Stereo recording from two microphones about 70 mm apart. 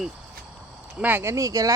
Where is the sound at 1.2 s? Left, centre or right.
Right.